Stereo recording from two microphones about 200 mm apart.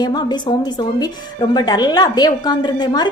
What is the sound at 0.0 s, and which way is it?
Speech, 20° left (ahead or behind).